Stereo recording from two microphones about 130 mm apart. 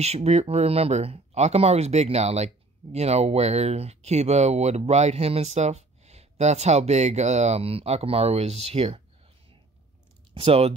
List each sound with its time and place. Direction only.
0.0 s speech: 55° right (ahead or behind)
10.3 s speech: 50° right (ahead or behind)